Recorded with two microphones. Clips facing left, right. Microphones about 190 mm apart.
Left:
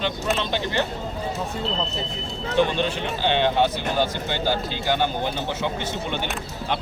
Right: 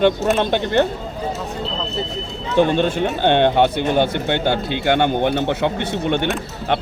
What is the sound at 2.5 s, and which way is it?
Speech, 50° right (ahead or behind).